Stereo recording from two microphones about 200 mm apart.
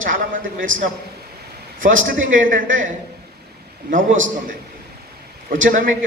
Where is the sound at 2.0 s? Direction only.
40° right (ahead or behind).